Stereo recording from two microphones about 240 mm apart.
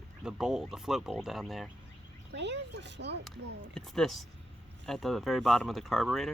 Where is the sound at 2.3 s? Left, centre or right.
Right.